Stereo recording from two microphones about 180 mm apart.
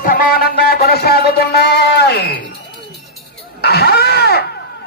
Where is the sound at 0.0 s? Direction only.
55° left (ahead or behind).